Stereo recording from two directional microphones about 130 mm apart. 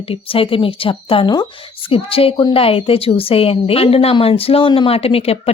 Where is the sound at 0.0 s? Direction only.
45° left (ahead or behind).